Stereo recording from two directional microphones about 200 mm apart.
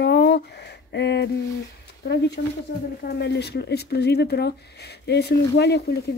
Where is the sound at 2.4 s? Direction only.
45° left (ahead or behind).